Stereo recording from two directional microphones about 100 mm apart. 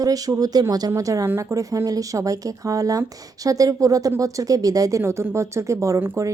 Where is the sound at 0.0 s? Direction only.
35° right (ahead or behind).